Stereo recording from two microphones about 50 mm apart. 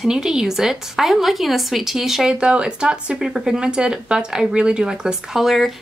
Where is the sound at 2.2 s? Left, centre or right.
Right.